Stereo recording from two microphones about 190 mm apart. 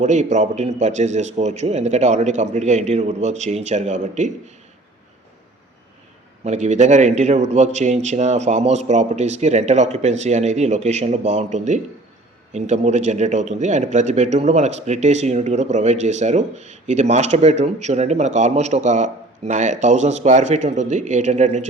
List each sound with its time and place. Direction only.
0.0 s speech: 40° right (ahead or behind)
6.4 s speech: 35° right (ahead or behind)